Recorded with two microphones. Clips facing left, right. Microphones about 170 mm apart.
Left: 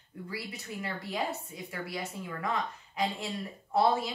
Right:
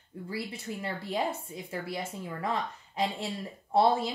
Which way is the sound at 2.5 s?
30° right (ahead or behind).